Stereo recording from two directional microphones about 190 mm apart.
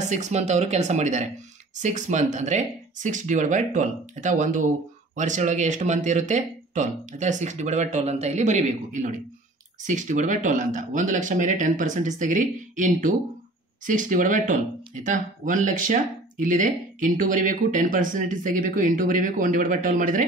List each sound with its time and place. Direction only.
0.1 s speech: 35° right (ahead or behind)